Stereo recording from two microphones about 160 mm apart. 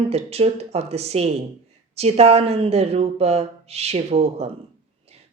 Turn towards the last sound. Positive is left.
turn(degrees=-40)  # may be behind; listen again after turning